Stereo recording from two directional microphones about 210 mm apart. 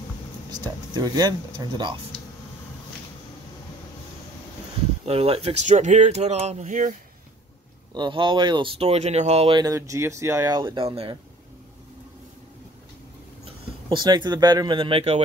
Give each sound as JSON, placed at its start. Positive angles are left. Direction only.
{"t": 0.5, "sound": "speech", "side_deg": -20}
{"t": 5.0, "sound": "speech", "side_deg": -30}
{"t": 7.9, "sound": "speech", "side_deg": -20}
{"t": 13.8, "sound": "speech", "side_deg": -20}